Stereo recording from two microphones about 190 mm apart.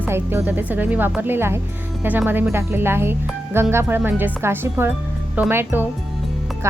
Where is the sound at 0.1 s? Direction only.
10° right (ahead or behind).